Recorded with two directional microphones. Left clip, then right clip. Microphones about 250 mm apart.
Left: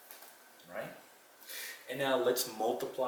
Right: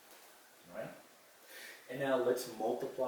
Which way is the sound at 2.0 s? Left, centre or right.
Centre.